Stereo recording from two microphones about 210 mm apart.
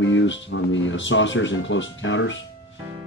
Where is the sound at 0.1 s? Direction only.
65° left (ahead or behind).